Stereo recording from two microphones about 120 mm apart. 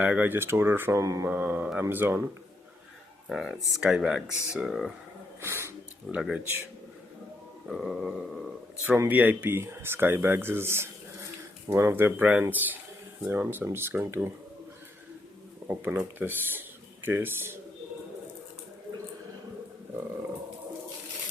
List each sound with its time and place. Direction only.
0.0 s speech: 15° right (ahead or behind)
3.2 s speech: centre (ahead or behind)
5.4 s a sound: 20° right (ahead or behind)
6.1 s speech: 5° right (ahead or behind)
7.7 s speech: centre (ahead or behind)
9.0 s speech: 15° right (ahead or behind)
15.6 s speech: 20° right (ahead or behind)